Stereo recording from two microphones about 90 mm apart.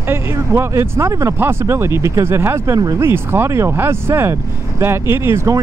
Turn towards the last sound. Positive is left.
turn(degrees=-35)  # may be behind; listen again after turning